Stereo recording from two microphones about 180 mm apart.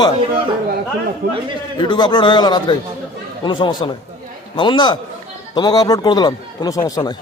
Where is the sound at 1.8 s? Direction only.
25° left (ahead or behind).